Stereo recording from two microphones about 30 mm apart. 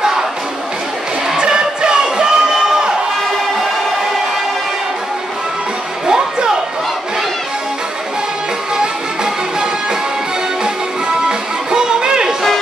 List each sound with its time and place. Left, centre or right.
1.3 s music: right
6.0 s music: right
8.7 s music: right
11.1 s music: right